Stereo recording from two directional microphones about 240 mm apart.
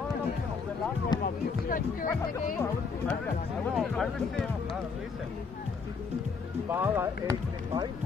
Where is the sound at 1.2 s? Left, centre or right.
Left.